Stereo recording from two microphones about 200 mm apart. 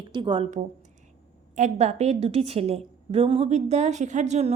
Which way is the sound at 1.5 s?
35° right (ahead or behind).